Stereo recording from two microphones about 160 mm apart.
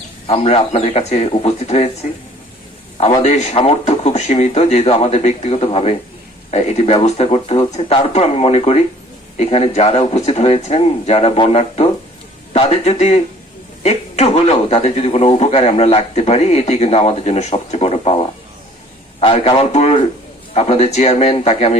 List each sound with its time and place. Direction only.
0.3 s a man's voice: 40° left (ahead or behind)
3.2 s a man's voice: 45° left (ahead or behind)